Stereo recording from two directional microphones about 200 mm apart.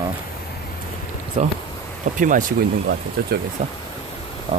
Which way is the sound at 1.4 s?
35° right (ahead or behind).